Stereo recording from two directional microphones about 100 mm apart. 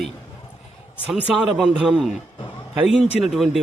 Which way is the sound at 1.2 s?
10° right (ahead or behind).